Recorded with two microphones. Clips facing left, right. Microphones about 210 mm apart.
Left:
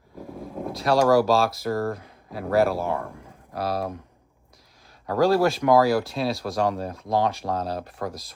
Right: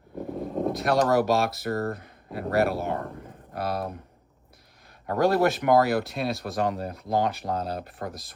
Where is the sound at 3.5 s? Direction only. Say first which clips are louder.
Left 2 dB; 55° right (ahead or behind).